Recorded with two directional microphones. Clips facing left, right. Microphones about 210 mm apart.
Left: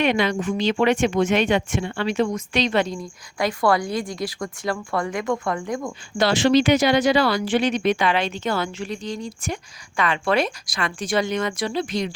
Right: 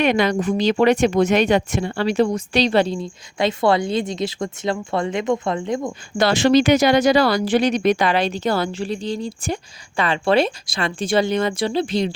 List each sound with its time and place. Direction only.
0.0 s speech: 45° right (ahead or behind); by 5.9 s 20° right (ahead or behind)
6.1 s speech: 45° right (ahead or behind); by 12.1 s 30° right (ahead or behind)